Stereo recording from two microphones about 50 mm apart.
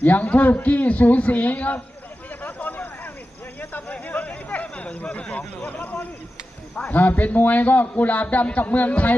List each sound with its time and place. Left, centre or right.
0.0 s a man's voice: left
2.4 s a sound: left
5.1 s a man's voice: left